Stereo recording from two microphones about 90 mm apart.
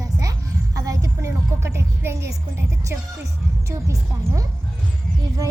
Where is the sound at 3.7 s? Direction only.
35° right (ahead or behind).